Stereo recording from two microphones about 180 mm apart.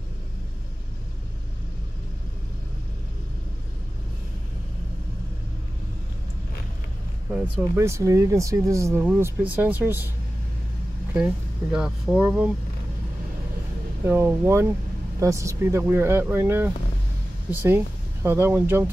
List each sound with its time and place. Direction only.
7.3 s speech: 10° right (ahead or behind)
12.2 s speech: 5° right (ahead or behind)
14.0 s speech: 10° right (ahead or behind)